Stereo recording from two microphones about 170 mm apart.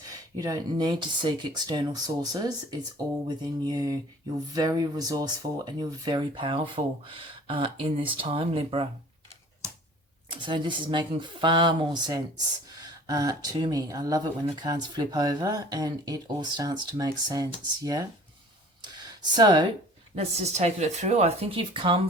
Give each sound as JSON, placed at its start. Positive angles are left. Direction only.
{"t": 0.0, "sound": "speech", "side_deg": -20}
{"t": 10.4, "sound": "speech", "side_deg": -30}
{"t": 19.2, "sound": "speech", "side_deg": -25}
{"t": 20.1, "sound": "speech", "side_deg": -40}